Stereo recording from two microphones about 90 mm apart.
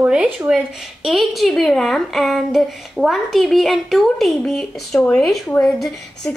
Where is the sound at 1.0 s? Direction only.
Centre (ahead or behind).